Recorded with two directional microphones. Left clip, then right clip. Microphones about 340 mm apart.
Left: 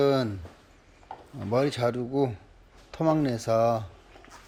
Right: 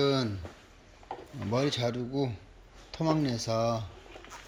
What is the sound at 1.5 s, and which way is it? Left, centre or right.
Speech, centre.